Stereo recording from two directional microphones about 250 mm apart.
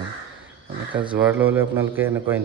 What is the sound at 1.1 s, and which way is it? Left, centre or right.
A man's voice, centre.